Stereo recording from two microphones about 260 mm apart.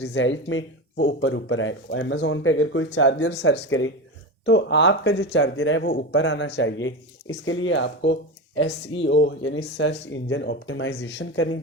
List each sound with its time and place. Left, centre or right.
0.0 s speech: left